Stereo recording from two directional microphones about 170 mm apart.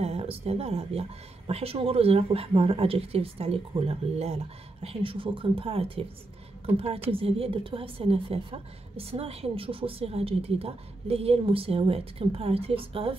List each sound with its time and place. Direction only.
0.0 s a woman's voice: 35° right (ahead or behind)
7.1 s a woman's voice: 35° right (ahead or behind)